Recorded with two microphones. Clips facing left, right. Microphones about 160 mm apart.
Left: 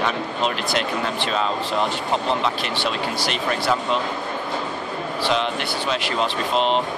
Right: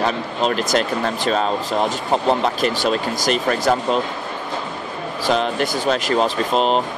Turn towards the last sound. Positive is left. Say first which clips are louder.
# right 3 dB
turn(degrees=-40)  # may be behind; listen again after turning